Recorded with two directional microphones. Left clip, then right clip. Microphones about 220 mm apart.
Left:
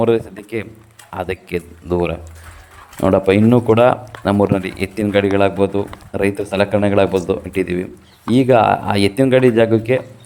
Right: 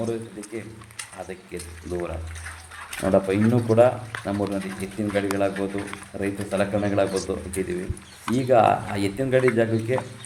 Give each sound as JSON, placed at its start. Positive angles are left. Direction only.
{"t": 0.0, "sound": "speech", "side_deg": 45}